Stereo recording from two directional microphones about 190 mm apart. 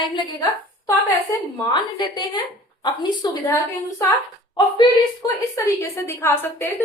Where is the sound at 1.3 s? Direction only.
20° left (ahead or behind).